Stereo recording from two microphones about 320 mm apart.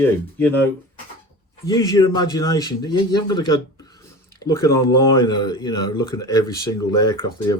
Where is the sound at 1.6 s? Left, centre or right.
Centre.